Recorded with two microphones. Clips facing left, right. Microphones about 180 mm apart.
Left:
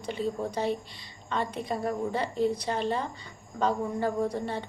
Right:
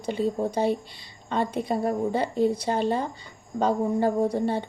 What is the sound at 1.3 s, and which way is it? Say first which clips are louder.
Speech: right 5 dB; 30° right (ahead or behind).